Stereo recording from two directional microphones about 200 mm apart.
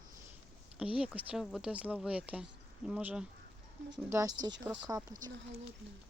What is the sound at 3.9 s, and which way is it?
Speech, 20° right (ahead or behind).